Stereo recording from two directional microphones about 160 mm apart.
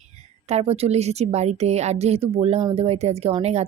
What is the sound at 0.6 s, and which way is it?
Speech, 40° right (ahead or behind).